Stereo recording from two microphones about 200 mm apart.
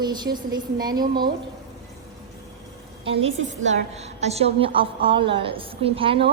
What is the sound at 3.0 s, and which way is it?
A woman's voice, 30° right (ahead or behind).